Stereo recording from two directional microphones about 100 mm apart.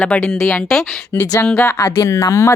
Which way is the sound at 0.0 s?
15° left (ahead or behind).